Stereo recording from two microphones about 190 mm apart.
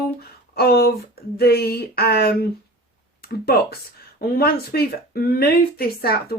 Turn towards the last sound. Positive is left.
turn(degrees=50)  # may be behind; listen again after turning